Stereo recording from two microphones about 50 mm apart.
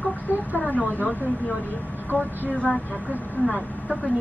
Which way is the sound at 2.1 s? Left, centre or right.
Right.